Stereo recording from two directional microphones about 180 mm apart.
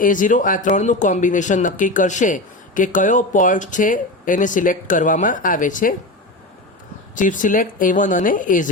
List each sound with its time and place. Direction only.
0.0 s speech: 45° left (ahead or behind)
7.2 s speech: 45° left (ahead or behind)